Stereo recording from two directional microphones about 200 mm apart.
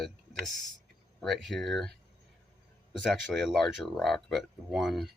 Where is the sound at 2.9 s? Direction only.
Centre (ahead or behind).